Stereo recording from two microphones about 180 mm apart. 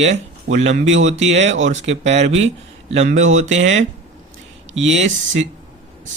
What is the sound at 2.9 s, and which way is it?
Speech, 40° right (ahead or behind).